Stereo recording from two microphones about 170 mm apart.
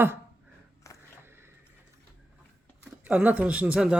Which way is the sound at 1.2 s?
15° right (ahead or behind).